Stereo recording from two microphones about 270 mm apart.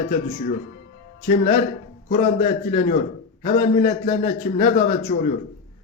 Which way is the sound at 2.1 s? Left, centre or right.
Left.